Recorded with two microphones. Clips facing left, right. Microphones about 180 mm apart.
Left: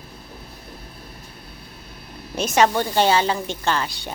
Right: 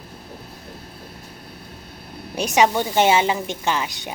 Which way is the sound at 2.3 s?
15° right (ahead or behind).